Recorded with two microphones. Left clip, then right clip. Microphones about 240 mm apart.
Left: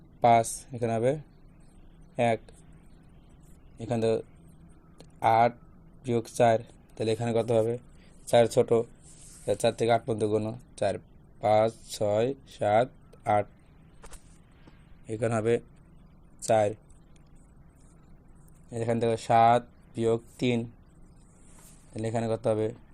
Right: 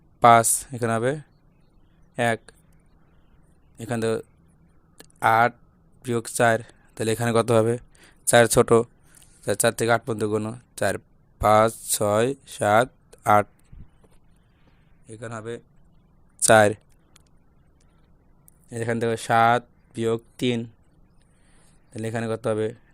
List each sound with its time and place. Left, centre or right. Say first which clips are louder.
0.2 s speech: right 7 dB; right
3.8 s speech: right 2 dB; right
4.9 s a sound: right 4 dB; right
6.0 s a man's voice: right 3 dB; right
15.0 s a man's voice: left 7 dB; centre
16.4 s speech: right 8 dB; right
18.7 s speech: right 2 dB; right
21.9 s speech: right 2 dB; right